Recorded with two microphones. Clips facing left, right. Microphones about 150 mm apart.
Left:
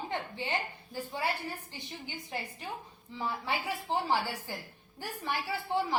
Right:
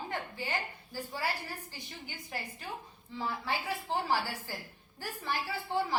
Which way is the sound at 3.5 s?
15° left (ahead or behind).